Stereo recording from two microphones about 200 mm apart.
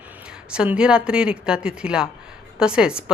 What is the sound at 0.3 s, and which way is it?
A woman's voice, 5° right (ahead or behind).